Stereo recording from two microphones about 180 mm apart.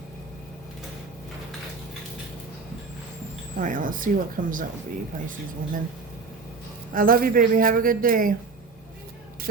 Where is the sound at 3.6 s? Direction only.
45° right (ahead or behind).